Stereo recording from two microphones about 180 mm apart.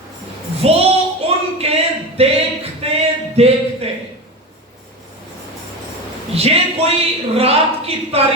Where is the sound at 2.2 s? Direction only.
35° right (ahead or behind).